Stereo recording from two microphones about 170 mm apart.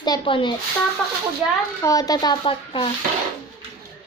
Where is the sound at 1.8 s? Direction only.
20° left (ahead or behind).